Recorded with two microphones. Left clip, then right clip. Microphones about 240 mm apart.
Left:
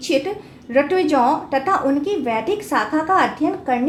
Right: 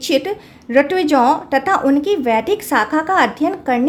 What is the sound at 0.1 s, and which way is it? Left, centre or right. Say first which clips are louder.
A woman's voice: right 2 dB; right.